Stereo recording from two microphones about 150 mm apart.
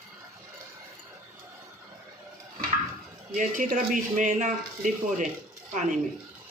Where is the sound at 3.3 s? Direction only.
60° right (ahead or behind).